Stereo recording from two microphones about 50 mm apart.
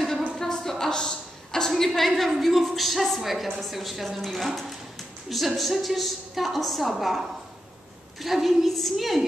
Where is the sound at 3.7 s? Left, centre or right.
Centre.